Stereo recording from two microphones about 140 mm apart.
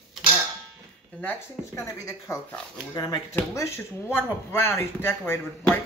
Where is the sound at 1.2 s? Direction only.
20° left (ahead or behind).